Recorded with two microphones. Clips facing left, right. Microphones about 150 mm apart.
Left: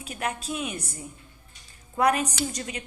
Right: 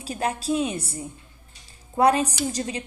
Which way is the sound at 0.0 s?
30° right (ahead or behind).